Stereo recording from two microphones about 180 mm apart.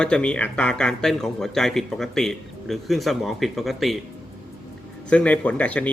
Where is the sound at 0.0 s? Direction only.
5° left (ahead or behind).